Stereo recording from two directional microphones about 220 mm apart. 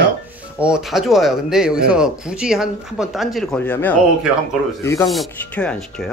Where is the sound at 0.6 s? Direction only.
5° right (ahead or behind).